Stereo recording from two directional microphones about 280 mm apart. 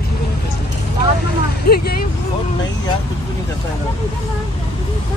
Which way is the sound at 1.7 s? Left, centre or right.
Left.